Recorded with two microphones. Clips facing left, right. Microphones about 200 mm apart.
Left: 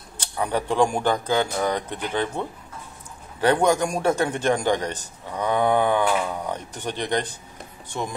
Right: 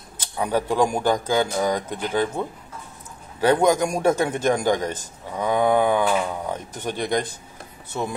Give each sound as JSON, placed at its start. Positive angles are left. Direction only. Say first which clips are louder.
{"t": 0.4, "sound": "speech", "louder": "right 1 dB", "side_deg": -10}